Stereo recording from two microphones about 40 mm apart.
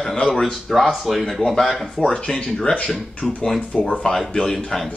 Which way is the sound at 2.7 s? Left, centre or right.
Left.